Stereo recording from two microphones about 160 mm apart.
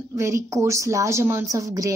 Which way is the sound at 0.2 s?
20° right (ahead or behind).